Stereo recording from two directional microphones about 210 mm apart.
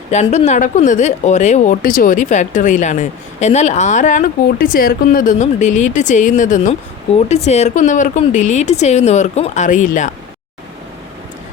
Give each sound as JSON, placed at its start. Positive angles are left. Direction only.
{"t": 0.1, "sound": "speech", "side_deg": 35}